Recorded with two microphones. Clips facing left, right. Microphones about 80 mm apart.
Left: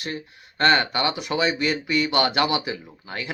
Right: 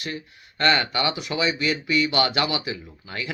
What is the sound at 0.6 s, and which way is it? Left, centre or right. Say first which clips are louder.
Speech: left 2 dB; left.